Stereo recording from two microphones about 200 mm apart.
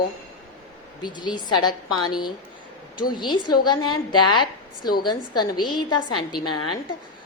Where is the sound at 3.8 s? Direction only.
90° left.